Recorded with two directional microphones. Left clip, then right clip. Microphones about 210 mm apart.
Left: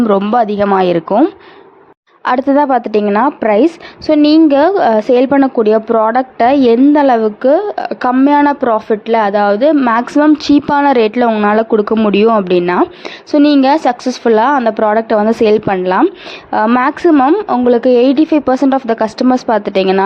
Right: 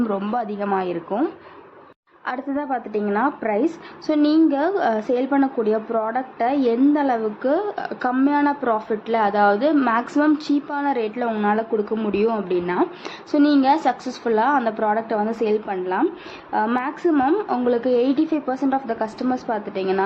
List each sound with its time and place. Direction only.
0.1 s speech: 35° left (ahead or behind)
2.2 s speech: 45° left (ahead or behind)